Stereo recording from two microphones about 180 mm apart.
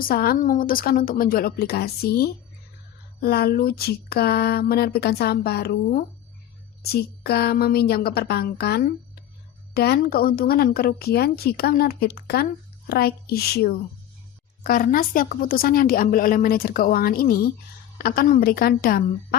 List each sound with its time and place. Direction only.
0.0 s speech: 55° left (ahead or behind)
14.6 s a woman's voice: 50° left (ahead or behind)